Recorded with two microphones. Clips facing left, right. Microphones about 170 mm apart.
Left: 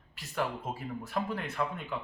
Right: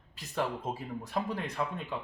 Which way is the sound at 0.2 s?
15° right (ahead or behind).